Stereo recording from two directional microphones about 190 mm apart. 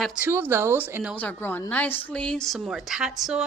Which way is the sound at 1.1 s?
10° left (ahead or behind).